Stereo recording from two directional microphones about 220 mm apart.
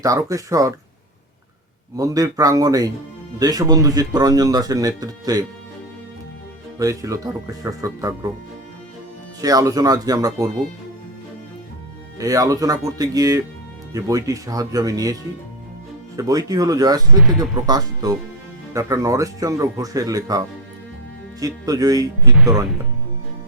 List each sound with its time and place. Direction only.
0.0 s speech: 15° right (ahead or behind)
2.0 s speech: 15° right (ahead or behind)
6.7 s speech: 15° right (ahead or behind)
9.4 s speech: 15° right (ahead or behind)
12.2 s speech: 15° right (ahead or behind)
16.1 s speech: 15° right (ahead or behind)
21.4 s speech: 15° right (ahead or behind)